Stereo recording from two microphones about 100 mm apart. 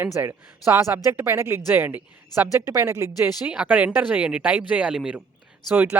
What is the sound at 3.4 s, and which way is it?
Speech, 15° right (ahead or behind).